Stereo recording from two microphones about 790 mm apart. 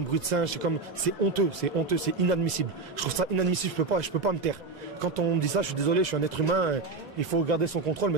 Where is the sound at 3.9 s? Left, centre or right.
Right.